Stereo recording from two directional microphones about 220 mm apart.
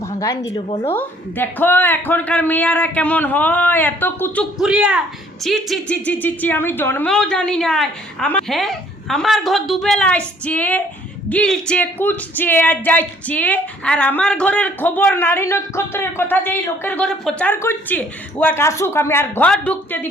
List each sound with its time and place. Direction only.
0.2 s a woman's voice: 15° left (ahead or behind)
0.9 s a woman's voice: 10° left (ahead or behind)